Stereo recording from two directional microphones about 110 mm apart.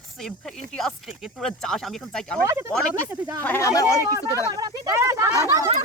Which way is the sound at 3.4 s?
20° left (ahead or behind).